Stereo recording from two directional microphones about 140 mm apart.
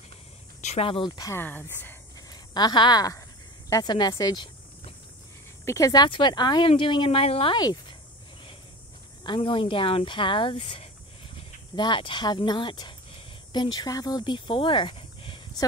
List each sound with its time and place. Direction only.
0.6 s a sound: 55° left (ahead or behind)
0.8 s speech: 35° left (ahead or behind)
1.3 s speech: 15° left (ahead or behind)
2.1 s a sound: 30° left (ahead or behind)
3.7 s speech: 30° left (ahead or behind)
5.7 s speech: 25° left (ahead or behind)
9.2 s speech: 35° left (ahead or behind)